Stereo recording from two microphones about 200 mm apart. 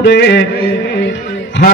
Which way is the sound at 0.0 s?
60° left (ahead or behind).